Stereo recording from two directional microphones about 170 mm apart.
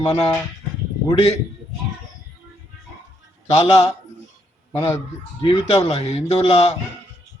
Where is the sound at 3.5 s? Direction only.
35° left (ahead or behind).